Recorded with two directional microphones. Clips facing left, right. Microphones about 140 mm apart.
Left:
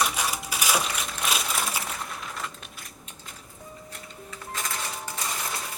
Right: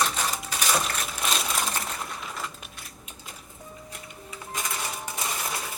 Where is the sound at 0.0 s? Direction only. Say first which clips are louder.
Even; 10° left (ahead or behind).